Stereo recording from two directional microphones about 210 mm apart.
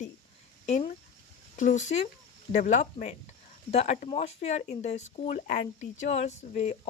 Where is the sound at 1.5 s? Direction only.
35° left (ahead or behind).